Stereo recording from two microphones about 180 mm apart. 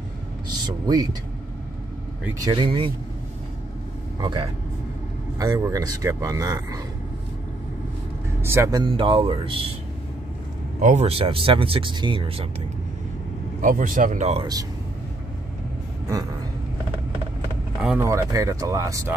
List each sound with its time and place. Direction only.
0.7 s speech: 20° right (ahead or behind)
2.4 s speech: 25° right (ahead or behind)
4.2 s speech: 25° right (ahead or behind)
8.4 s speech: 15° right (ahead or behind); by 9.7 s 30° right (ahead or behind)
10.8 s speech: 40° right (ahead or behind)
13.6 s speech: 50° right (ahead or behind)
14.4 s speech: 20° right (ahead or behind)
17.8 s speech: 15° right (ahead or behind)